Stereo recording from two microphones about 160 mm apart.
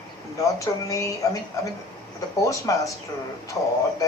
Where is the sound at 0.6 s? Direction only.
20° left (ahead or behind).